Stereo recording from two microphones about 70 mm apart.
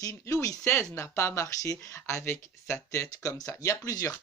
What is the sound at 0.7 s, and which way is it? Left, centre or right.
Speech, left.